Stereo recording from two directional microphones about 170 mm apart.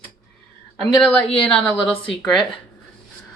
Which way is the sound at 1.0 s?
5° left (ahead or behind).